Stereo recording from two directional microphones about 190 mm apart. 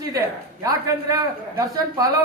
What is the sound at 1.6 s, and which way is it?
Speech, 20° right (ahead or behind).